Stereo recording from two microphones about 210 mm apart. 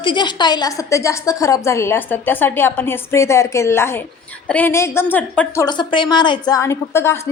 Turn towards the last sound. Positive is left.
turn(degrees=10)  # may be behind; listen again after turning